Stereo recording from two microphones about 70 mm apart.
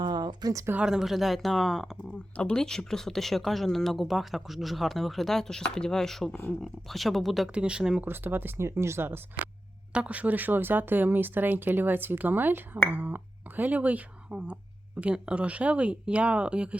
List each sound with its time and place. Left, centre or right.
0.0 s a sound: right
0.8 s speech: centre
2.3 s speech: centre
7.5 s speech: centre
8.0 s speech: right
9.9 s speech: centre